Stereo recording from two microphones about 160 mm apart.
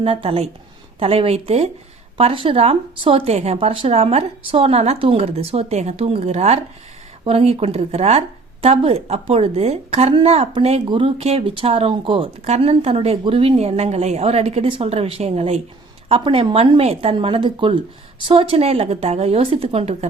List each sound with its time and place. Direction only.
0.0 s speech: 35° right (ahead or behind)